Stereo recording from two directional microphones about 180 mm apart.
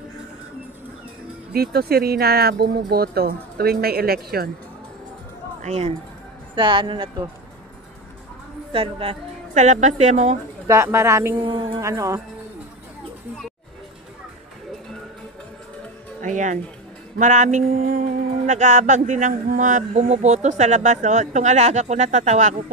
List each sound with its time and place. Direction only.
1.5 s speech: 60° right (ahead or behind)
5.6 s a woman's voice: 35° right (ahead or behind)
8.7 s speech: 30° right (ahead or behind)
9.5 s speech: 40° right (ahead or behind)
10.7 s a woman's voice: 15° right (ahead or behind)
11.4 s a woman's voice: 25° right (ahead or behind)
16.2 s speech: 45° right (ahead or behind)
17.2 s mantra: 45° right (ahead or behind)
18.5 s speech: 45° right (ahead or behind)